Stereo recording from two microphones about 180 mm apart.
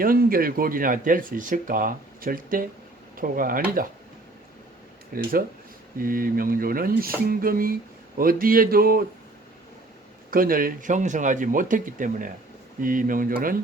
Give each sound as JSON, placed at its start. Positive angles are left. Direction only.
{"t": 0.0, "sound": "speech", "side_deg": -55}
{"t": 5.1, "sound": "speech", "side_deg": -55}
{"t": 10.3, "sound": "speech", "side_deg": -50}